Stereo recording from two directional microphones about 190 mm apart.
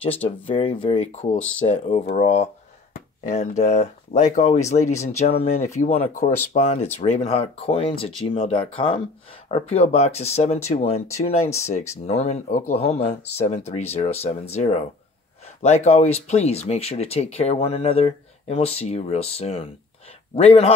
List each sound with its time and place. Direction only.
0.2 s speech: 30° left (ahead or behind)